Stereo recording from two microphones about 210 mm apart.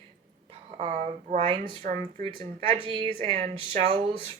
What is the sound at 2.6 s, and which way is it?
Speech, 25° right (ahead or behind).